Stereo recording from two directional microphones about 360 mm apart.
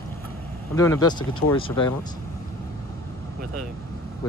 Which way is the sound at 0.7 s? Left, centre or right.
Centre.